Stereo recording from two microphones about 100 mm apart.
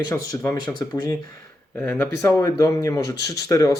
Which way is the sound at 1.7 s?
15° left (ahead or behind).